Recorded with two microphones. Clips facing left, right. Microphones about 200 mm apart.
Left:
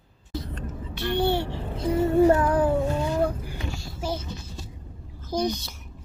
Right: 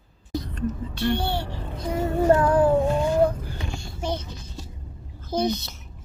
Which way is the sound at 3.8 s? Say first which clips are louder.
Right 2 dB; 5° left (ahead or behind).